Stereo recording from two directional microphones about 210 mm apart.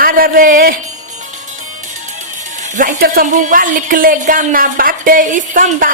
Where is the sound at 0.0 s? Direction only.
45° right (ahead or behind).